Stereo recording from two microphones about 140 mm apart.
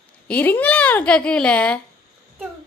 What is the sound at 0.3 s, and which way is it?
A woman's voice, 10° left (ahead or behind).